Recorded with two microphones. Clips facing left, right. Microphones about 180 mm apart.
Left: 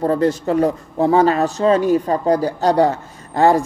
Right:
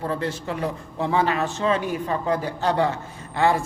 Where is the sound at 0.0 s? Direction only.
40° left (ahead or behind).